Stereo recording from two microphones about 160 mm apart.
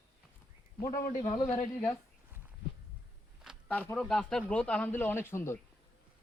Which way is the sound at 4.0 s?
5° left (ahead or behind).